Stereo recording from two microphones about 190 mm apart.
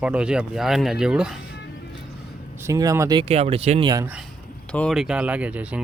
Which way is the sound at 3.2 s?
35° right (ahead or behind).